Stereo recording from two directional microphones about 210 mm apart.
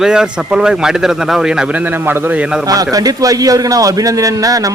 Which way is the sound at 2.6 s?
15° right (ahead or behind).